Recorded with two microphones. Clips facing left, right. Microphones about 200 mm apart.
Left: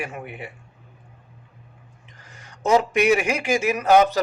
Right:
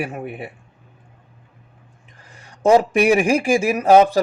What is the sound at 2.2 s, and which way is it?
A man's voice, 30° right (ahead or behind).